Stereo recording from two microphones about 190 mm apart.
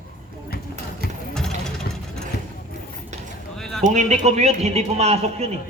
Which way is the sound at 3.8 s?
40° right (ahead or behind).